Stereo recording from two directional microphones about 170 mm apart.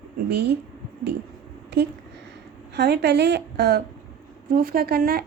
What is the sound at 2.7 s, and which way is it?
A woman's voice, 80° right.